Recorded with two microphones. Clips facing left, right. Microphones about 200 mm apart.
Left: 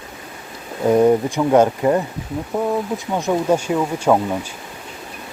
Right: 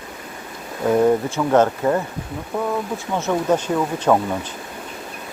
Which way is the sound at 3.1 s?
10° left (ahead or behind).